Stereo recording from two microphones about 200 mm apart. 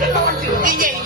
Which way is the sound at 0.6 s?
40° right (ahead or behind).